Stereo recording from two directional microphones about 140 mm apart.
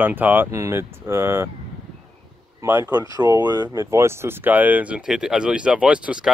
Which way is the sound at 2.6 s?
20° right (ahead or behind).